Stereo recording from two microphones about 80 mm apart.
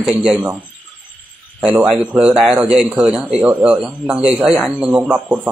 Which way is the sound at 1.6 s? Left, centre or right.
Centre.